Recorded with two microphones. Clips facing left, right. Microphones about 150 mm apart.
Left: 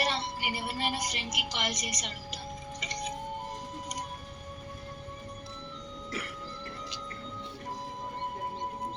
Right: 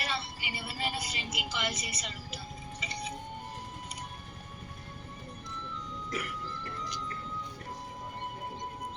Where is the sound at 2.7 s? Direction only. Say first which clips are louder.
Left 2 dB; 40° left (ahead or behind).